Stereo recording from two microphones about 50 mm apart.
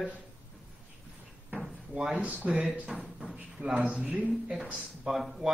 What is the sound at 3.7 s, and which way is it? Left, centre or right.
A man's voice, right.